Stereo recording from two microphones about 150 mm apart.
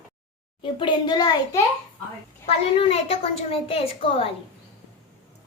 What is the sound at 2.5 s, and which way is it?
A woman's voice, 40° left (ahead or behind).